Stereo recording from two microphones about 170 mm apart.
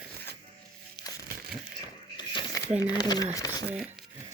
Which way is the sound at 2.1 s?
25° left (ahead or behind).